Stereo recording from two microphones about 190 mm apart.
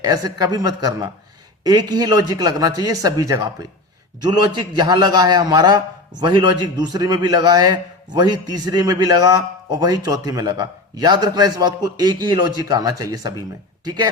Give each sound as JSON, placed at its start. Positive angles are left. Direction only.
{"t": 0.0, "sound": "a man's voice", "side_deg": -20}